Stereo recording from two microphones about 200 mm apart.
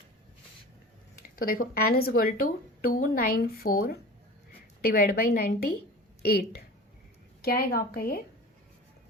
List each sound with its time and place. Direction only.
1.4 s speech: 45° left (ahead or behind)
7.4 s speech: 50° left (ahead or behind)